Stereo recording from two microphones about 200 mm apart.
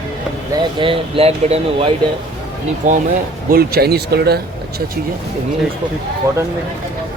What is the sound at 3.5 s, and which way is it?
Speech, 50° right (ahead or behind).